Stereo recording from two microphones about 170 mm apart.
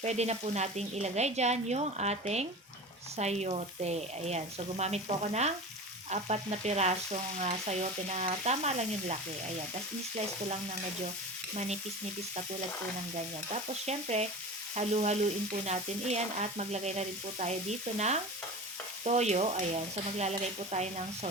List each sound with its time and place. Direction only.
0.0 s stir: 40° right (ahead or behind)
13.1 s stir: 40° right (ahead or behind)